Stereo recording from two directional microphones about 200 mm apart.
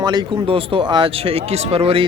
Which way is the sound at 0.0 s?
20° right (ahead or behind).